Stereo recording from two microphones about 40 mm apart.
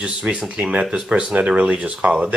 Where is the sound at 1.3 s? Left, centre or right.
Right.